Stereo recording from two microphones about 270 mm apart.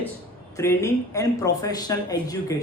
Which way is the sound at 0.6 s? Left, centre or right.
Centre.